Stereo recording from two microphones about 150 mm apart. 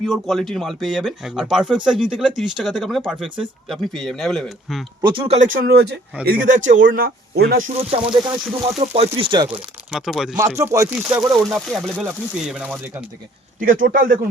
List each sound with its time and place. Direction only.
0.0 s speech: centre (ahead or behind)
5.0 s speech: 35° right (ahead or behind)
5.4 s speech: 80° right
6.5 s speech: 60° right (ahead or behind)
7.0 s speech: 85° right
7.8 s speech: 40° right (ahead or behind)
9.6 s speech: 5° right (ahead or behind)
10.6 s speech: 20° right (ahead or behind)
13.6 s a man's voice: 65° right (ahead or behind)